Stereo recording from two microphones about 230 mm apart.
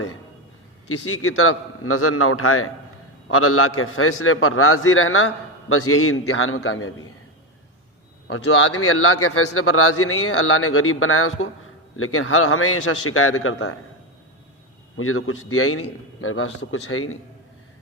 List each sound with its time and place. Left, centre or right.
0.9 s a man's voice: left
8.3 s a man's voice: left
14.9 s a man's voice: left